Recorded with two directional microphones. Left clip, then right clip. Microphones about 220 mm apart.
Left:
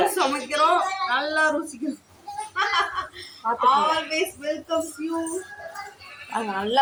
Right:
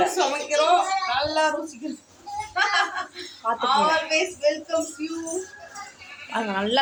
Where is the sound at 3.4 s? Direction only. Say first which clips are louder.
Even; 15° right (ahead or behind).